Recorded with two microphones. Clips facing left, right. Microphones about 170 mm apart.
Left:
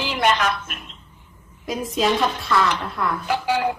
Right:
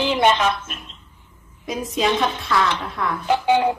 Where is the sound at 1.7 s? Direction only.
Centre (ahead or behind).